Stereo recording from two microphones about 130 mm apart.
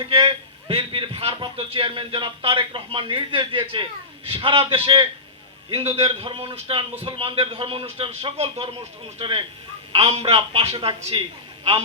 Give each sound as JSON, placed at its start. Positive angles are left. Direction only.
{"t": 0.0, "sound": "a man's voice", "side_deg": -45}